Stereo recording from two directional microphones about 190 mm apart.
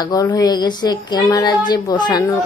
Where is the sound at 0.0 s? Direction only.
20° left (ahead or behind).